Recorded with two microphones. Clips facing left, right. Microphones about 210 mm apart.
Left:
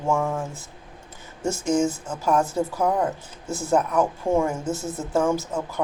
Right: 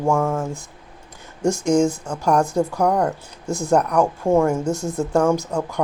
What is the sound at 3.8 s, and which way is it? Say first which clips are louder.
Speech: right 2 dB; 70° right (ahead or behind).